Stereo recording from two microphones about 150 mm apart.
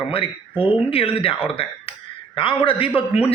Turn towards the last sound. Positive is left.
turn(degrees=40)  # may be behind; listen again after turning